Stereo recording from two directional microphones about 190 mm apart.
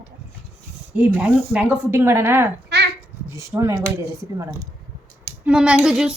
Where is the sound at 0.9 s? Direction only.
5° right (ahead or behind).